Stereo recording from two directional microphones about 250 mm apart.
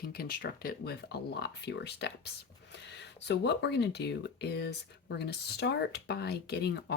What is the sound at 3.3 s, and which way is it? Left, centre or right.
Speech, left.